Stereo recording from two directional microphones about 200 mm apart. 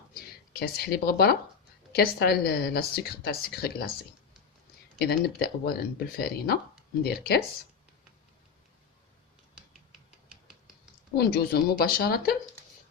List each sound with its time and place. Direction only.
0.1 s a woman's voice: 50° left (ahead or behind)
4.9 s a woman's voice: 50° left (ahead or behind)
11.2 s a woman's voice: 50° left (ahead or behind)